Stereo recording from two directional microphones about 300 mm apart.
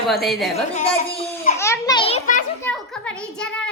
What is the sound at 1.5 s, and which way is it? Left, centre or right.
Children playing, centre.